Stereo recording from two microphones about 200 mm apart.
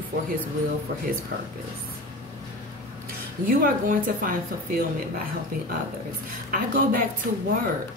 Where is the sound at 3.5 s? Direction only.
45° right (ahead or behind).